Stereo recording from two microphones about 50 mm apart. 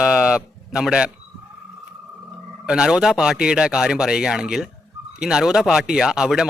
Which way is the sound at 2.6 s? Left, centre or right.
Centre.